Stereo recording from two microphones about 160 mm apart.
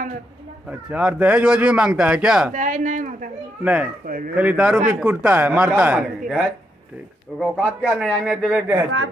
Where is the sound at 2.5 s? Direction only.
50° right (ahead or behind).